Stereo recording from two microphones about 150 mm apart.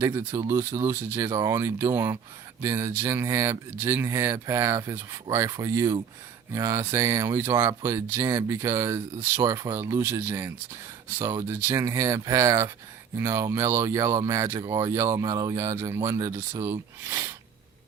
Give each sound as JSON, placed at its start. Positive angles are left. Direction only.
{"t": 0.0, "sound": "speech", "side_deg": -15}